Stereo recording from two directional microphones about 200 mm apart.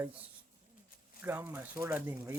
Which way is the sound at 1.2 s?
10° right (ahead or behind).